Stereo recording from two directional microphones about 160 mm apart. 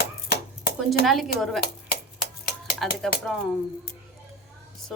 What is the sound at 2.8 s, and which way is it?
Speech, centre (ahead or behind).